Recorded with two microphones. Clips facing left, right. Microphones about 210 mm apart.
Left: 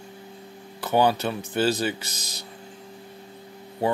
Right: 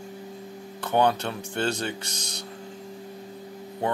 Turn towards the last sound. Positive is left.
turn(degrees=5)  # may be behind; listen again after turning